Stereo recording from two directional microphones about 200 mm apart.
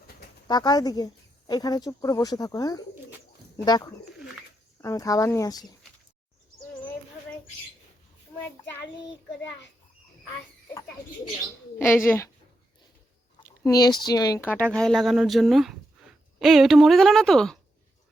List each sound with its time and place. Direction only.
0.4 s speech: 20° left (ahead or behind)
11.8 s speech: 10° left (ahead or behind)
13.4 s a sound: 20° left (ahead or behind)
14.0 s speech: 20° left (ahead or behind); by 17.6 s centre (ahead or behind)